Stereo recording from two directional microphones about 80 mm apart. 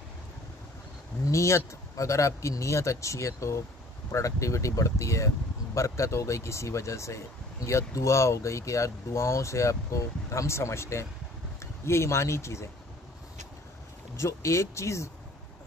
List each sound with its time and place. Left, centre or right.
1.2 s speech: left
14.1 s speech: left